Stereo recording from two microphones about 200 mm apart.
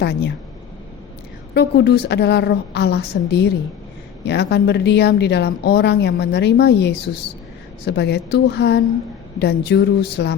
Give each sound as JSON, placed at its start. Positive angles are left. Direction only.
{"t": 0.0, "sound": "a woman's voice", "side_deg": 60}
{"t": 1.5, "sound": "a woman's voice", "side_deg": 55}